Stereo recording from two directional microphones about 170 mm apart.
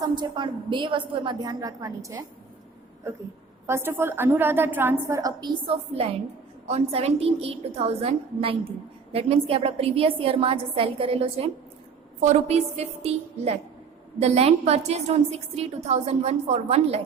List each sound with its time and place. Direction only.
0.0 s a woman's voice: 25° right (ahead or behind)
3.7 s a woman's voice: 15° right (ahead or behind); by 17.0 s 35° right (ahead or behind)